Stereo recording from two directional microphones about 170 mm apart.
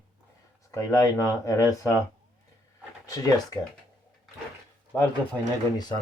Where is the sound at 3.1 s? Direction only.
20° left (ahead or behind).